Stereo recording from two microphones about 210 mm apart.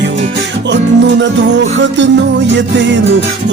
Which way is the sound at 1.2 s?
55° right (ahead or behind).